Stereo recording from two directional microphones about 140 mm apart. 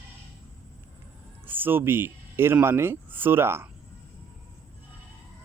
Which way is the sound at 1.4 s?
15° right (ahead or behind).